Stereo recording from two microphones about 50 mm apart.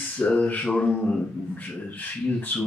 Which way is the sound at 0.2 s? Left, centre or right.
Left.